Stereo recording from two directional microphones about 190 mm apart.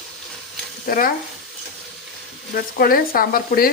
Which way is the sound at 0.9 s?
45° left (ahead or behind).